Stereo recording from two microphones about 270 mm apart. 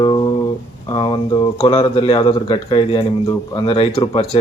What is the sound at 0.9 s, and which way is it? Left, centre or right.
Speech, centre.